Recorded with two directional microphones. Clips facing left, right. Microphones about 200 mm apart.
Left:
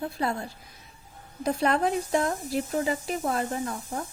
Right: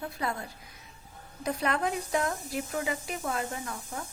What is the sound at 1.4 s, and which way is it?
Speech, 30° left (ahead or behind).